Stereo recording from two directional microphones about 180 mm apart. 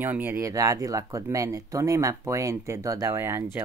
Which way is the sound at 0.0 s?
10° right (ahead or behind).